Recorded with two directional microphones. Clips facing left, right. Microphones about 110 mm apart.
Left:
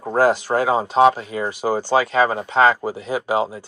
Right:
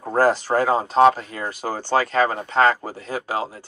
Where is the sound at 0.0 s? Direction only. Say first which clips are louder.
Left 1 dB; 5° left (ahead or behind).